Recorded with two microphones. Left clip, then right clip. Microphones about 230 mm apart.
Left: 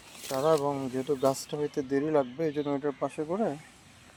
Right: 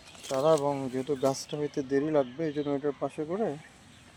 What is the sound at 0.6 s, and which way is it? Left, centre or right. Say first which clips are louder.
Speech: even; centre.